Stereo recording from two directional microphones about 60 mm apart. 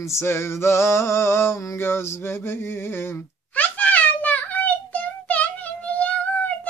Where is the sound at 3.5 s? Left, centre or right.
Left.